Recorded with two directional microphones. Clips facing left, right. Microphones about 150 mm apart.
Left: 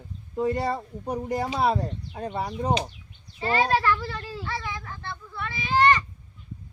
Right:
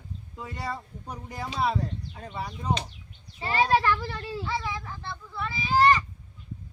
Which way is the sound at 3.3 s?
15° right (ahead or behind).